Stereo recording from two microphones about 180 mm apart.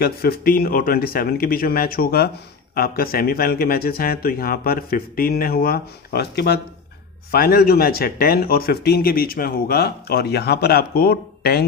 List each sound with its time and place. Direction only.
0.0 s speech: 60° left (ahead or behind)